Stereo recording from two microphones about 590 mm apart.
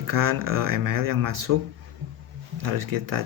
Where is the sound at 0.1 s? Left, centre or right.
Right.